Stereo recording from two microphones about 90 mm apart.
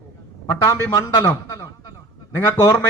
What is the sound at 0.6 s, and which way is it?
A man's voice, 35° left (ahead or behind).